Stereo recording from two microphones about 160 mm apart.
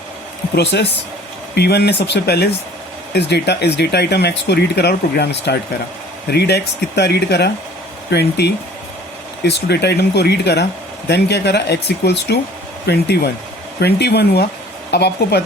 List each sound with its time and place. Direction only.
0.5 s speech: 90° left